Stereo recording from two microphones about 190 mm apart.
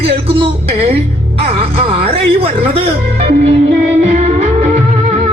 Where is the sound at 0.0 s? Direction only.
30° right (ahead or behind).